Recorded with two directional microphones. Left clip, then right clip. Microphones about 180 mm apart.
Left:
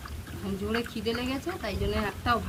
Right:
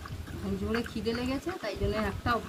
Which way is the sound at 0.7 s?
10° right (ahead or behind).